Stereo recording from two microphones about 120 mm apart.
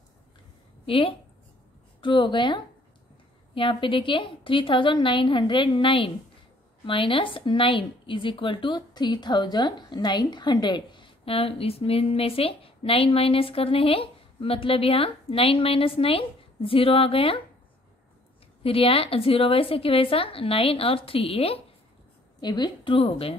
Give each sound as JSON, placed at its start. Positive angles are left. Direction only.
{"t": 0.8, "sound": "a woman's voice", "side_deg": 50}
{"t": 18.6, "sound": "speech", "side_deg": 50}
{"t": 22.4, "sound": "speech", "side_deg": 35}